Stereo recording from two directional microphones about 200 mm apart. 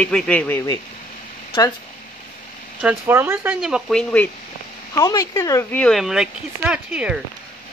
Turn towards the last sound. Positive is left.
turn(degrees=-5)  # may be behind; listen again after turning